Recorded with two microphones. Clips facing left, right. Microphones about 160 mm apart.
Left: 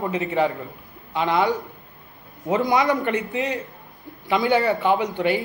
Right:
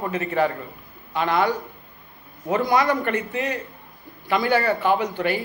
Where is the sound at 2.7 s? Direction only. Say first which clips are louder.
Even; 20° left (ahead or behind).